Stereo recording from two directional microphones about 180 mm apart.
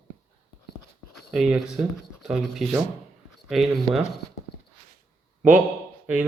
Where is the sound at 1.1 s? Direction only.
Centre (ahead or behind).